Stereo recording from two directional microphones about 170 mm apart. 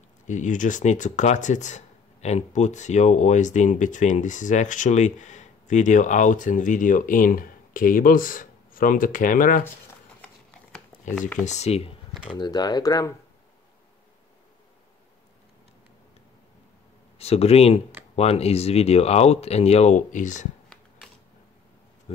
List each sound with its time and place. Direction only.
0.3 s speech: 45° left (ahead or behind)
11.4 s speech: 40° left (ahead or behind)
12.3 s speech: 25° left (ahead or behind)
17.2 s speech: 35° left (ahead or behind)